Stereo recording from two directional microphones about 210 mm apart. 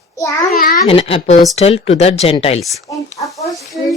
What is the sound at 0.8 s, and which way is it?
A woman's voice, 25° left (ahead or behind).